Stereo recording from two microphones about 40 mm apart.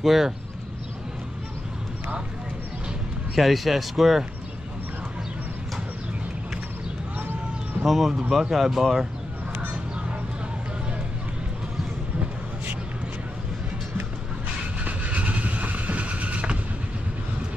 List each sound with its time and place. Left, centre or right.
0.0 s speech: centre
3.3 s speech: centre
7.8 s speech: centre
14.8 s vehicle: right